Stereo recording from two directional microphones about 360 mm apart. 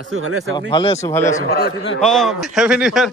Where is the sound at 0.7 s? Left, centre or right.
Centre.